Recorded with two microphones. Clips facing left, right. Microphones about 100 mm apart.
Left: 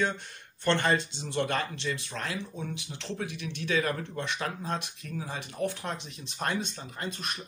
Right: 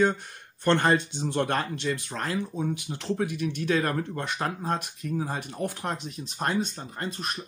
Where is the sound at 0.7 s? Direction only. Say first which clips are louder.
Right 4 dB; 45° right (ahead or behind).